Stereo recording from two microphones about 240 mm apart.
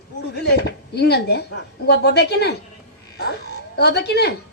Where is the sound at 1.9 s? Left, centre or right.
Left.